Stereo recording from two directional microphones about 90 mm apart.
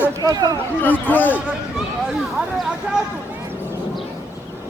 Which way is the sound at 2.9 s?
15° right (ahead or behind).